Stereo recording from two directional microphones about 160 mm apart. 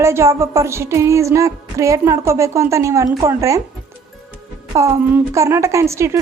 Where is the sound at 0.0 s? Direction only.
15° right (ahead or behind).